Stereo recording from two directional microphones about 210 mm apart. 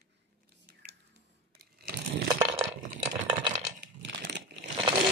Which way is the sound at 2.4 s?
25° right (ahead or behind).